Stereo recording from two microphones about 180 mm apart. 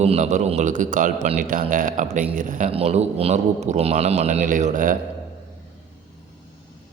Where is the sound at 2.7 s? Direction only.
35° right (ahead or behind).